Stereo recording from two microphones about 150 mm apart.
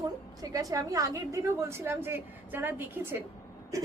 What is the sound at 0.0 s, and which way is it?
A woman's voice, 25° right (ahead or behind).